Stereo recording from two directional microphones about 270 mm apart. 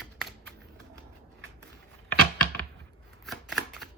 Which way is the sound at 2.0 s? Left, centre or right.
Centre.